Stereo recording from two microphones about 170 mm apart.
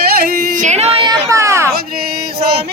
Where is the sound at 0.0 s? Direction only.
65° right (ahead or behind).